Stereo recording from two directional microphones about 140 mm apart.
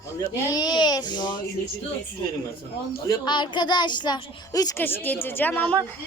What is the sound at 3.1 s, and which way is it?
Speech, 35° left (ahead or behind).